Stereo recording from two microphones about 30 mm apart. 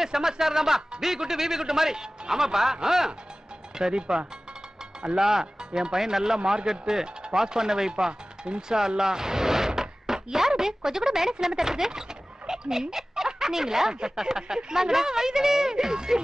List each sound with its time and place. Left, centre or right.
0.0 s a man's voice: centre
8.1 s a sound: right
10.6 s a woman's voice: centre
12.4 s dog: centre
12.9 s a sound: centre
13.9 s a man's voice: right